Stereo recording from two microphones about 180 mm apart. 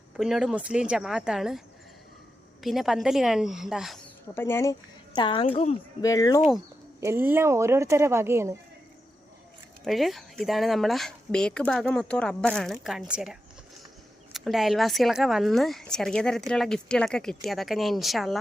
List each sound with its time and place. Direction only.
0.2 s speech: 5° right (ahead or behind)
4.4 s a woman's voice: 15° left (ahead or behind); by 5.7 s 30° left (ahead or behind)
6.0 s a woman's voice: 20° left (ahead or behind)
7.0 s a woman's voice: 15° right (ahead or behind)
9.8 s speech: centre (ahead or behind)
14.3 s speech: centre (ahead or behind)